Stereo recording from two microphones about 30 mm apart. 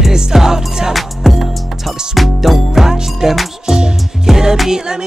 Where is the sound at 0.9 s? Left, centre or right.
Centre.